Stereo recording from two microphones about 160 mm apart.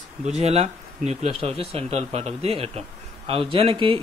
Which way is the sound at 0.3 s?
40° right (ahead or behind).